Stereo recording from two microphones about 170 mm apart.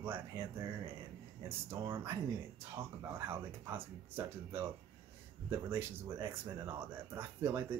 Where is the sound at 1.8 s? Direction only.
30° right (ahead or behind).